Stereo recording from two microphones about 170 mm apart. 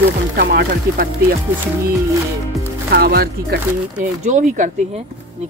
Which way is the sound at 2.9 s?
65° right (ahead or behind).